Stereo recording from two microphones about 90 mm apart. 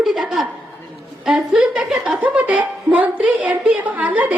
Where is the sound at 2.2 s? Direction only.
15° right (ahead or behind).